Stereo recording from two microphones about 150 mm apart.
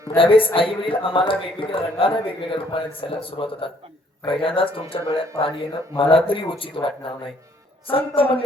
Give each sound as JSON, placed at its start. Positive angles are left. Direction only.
{"t": 0.2, "sound": "speech", "side_deg": 35}